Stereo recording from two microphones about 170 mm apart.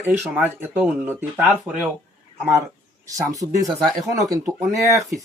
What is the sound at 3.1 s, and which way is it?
Speech, 20° right (ahead or behind).